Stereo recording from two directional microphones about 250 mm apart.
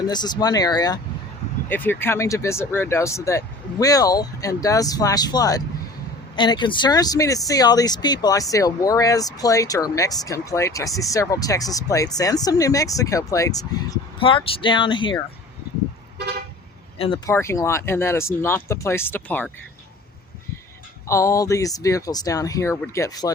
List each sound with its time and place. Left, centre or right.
0.1 s speech: centre
17.0 s speech: centre
21.1 s speech: centre